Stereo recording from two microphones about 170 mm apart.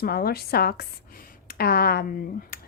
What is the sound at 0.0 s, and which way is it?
A woman's voice, 65° left (ahead or behind).